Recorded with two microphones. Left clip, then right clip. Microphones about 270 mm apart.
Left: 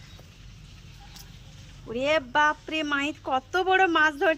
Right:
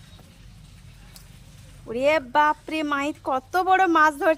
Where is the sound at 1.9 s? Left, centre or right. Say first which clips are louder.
Right 4 dB; centre.